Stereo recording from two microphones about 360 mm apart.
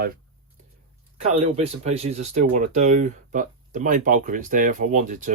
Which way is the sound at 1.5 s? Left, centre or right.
Centre.